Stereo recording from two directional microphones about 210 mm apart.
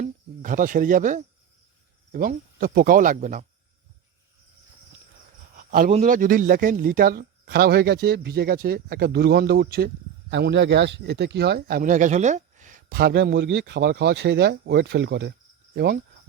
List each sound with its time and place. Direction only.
0.0 s speech: 40° right (ahead or behind)
5.5 s a sound: 45° right (ahead or behind)
5.9 s speech: 40° right (ahead or behind)